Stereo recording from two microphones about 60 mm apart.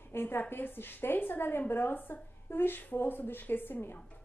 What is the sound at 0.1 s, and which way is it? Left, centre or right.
A woman's voice, left.